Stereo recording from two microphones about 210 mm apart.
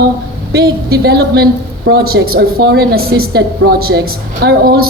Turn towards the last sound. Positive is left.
turn(degrees=-45)  # may be behind; listen again after turning